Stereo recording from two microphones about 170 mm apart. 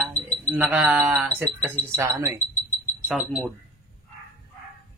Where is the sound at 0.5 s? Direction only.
10° right (ahead or behind).